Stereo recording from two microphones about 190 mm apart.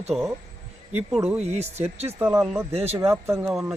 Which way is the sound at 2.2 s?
10° right (ahead or behind).